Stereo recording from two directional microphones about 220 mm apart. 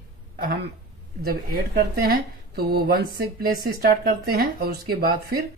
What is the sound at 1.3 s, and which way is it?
A woman's voice, 45° right (ahead or behind).